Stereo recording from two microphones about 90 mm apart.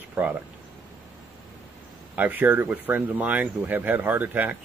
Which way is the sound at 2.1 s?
20° right (ahead or behind).